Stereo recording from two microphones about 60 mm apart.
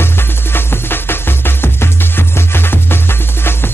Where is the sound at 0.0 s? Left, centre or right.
Left.